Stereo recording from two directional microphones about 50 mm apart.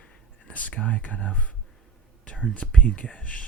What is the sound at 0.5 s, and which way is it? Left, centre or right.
Speech, left.